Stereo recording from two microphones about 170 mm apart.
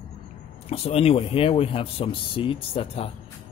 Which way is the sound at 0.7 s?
35° left (ahead or behind).